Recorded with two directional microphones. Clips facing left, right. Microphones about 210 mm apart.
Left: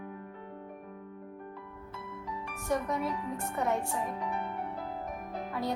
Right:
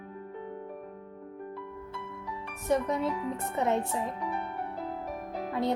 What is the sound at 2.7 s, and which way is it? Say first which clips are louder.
Speech: right 4 dB; 25° right (ahead or behind).